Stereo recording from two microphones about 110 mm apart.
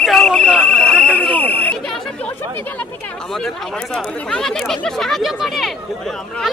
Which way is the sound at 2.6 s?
15° left (ahead or behind).